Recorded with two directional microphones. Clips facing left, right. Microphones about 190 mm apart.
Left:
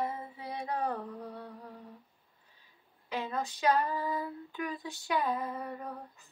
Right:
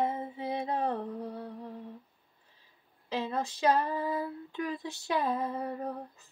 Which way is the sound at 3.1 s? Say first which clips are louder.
Right 2 dB; 30° right (ahead or behind).